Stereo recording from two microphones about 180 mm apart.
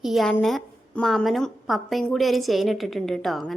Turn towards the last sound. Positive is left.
turn(degrees=0)  # may be behind; listen again after turning